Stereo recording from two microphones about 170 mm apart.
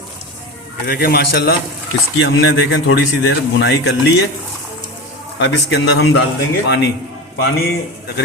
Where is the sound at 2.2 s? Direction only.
90° left.